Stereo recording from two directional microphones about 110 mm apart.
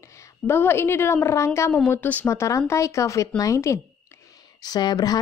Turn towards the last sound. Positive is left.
turn(degrees=35)  # may be behind; listen again after turning